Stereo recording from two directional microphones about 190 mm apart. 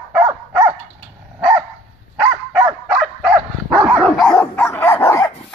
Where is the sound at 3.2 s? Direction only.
Centre (ahead or behind); by 5.3 s 15° left (ahead or behind).